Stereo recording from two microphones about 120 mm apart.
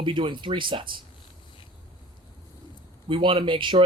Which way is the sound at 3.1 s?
45° right (ahead or behind).